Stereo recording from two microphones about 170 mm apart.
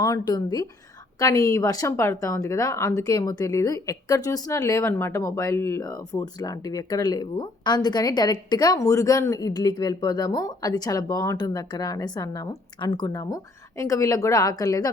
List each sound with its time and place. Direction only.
0.0 s a woman's voice: 20° left (ahead or behind)